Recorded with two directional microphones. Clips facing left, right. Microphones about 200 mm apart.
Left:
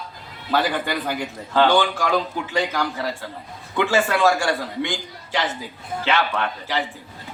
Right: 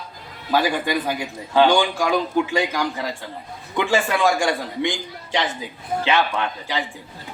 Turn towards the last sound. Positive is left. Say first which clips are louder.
# even
turn(degrees=-15)  # may be behind; listen again after turning